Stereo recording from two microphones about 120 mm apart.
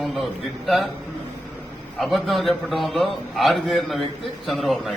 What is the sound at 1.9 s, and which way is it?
A man's voice, centre (ahead or behind).